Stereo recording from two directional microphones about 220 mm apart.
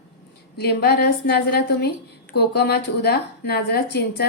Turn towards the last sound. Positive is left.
turn(degrees=45)  # may be behind; listen again after turning